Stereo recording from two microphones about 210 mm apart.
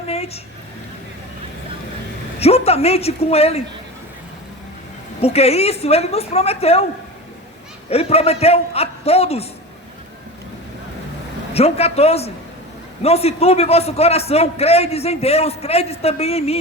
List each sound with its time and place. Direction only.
2.4 s a man's voice: 30° left (ahead or behind)
5.2 s a man's voice: 30° left (ahead or behind)
7.9 s a man's voice: 30° left (ahead or behind)
11.5 s a man's voice: 30° left (ahead or behind)